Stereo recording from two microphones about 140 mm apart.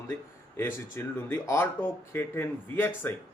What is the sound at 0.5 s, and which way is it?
Speech, 15° left (ahead or behind).